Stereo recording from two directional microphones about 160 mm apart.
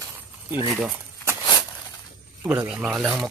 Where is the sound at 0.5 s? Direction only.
15° right (ahead or behind).